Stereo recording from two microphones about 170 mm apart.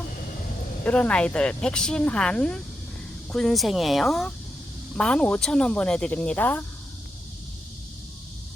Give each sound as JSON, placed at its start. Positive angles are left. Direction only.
{"t": 0.9, "sound": "speech", "side_deg": 5}